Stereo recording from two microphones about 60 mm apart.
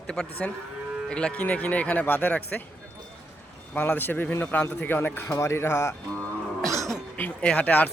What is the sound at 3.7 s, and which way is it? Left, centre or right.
A man's voice, left.